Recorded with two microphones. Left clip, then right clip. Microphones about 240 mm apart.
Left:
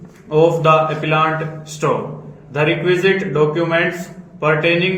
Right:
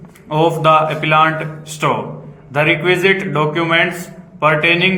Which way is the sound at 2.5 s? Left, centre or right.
Centre.